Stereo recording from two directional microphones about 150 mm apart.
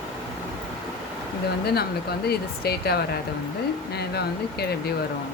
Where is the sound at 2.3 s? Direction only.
90° left.